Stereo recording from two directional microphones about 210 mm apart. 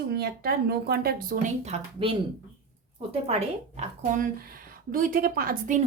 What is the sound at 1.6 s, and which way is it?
Speech, 30° right (ahead or behind).